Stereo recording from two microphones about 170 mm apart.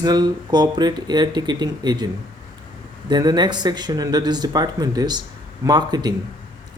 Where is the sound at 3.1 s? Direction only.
25° right (ahead or behind).